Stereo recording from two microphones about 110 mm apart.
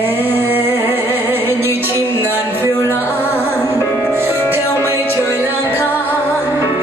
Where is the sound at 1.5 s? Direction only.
20° right (ahead or behind).